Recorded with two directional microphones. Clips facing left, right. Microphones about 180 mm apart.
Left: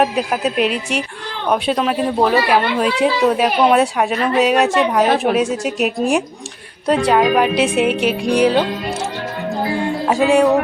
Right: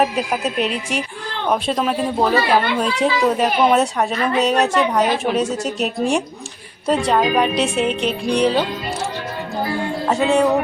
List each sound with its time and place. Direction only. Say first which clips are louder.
0.0 s speech: left 2 dB; centre (ahead or behind)
5.0 s a woman's voice: left 4 dB; 55° left (ahead or behind)
5.3 s a woman's voice: left 3 dB; 10° left (ahead or behind)
10.1 s a woman's voice: left 3 dB; 10° left (ahead or behind)